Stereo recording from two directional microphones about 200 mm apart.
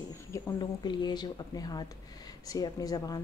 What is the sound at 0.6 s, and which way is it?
Speech, 20° left (ahead or behind).